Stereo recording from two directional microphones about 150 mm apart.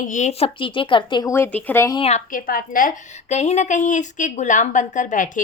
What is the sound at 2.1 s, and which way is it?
Speech, 50° left (ahead or behind).